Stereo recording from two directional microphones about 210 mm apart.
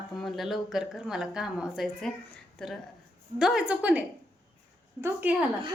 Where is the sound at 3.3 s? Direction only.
Centre (ahead or behind).